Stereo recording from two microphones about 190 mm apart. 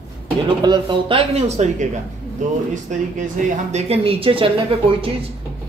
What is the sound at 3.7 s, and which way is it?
Speech, 35° right (ahead or behind).